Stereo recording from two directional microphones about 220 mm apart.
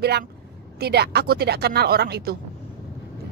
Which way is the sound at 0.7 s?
45° right (ahead or behind).